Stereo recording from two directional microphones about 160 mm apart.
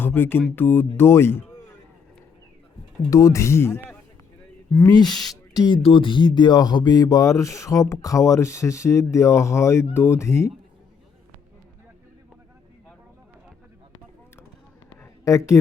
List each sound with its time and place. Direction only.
0.0 s music: 15° left (ahead or behind)
0.5 s speech: 10° left (ahead or behind)
3.1 s speech: 20° left (ahead or behind)
4.9 s speech: 25° left (ahead or behind)
15.2 s speech: 20° left (ahead or behind)